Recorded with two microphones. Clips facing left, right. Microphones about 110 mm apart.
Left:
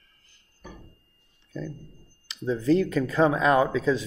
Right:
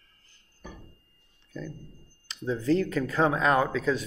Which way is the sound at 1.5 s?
15° left (ahead or behind).